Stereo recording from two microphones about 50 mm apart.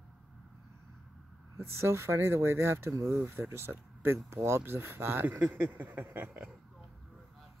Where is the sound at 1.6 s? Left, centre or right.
Right.